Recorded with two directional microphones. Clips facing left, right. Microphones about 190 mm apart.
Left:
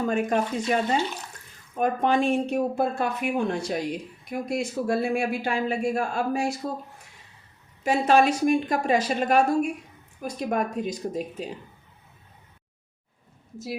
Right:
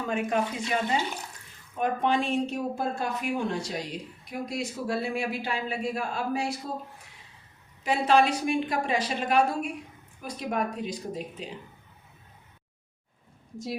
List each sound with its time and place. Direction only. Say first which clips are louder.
0.1 s speech: left 3 dB; 40° left (ahead or behind)
7.9 s speech: left 3 dB; 45° left (ahead or behind)